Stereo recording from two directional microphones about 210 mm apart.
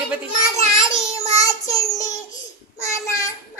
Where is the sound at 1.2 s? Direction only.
15° left (ahead or behind).